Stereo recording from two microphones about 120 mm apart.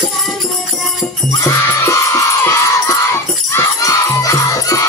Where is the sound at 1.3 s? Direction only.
25° left (ahead or behind).